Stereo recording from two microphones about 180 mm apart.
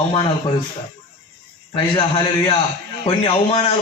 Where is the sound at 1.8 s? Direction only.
25° left (ahead or behind).